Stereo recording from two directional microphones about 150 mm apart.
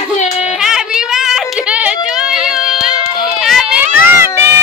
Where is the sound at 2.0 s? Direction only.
5° right (ahead or behind).